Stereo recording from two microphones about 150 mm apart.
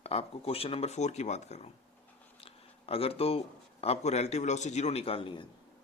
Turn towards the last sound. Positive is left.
turn(degrees=35)  # may be behind; listen again after turning